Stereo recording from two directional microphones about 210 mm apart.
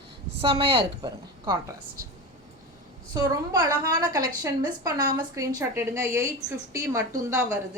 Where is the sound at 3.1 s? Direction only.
20° right (ahead or behind).